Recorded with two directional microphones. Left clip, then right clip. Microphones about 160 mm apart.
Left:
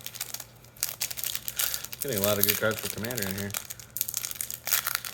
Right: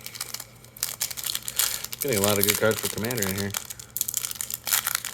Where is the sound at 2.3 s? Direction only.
40° right (ahead or behind).